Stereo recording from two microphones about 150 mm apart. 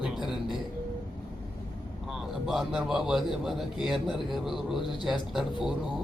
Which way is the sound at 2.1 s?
Centre (ahead or behind).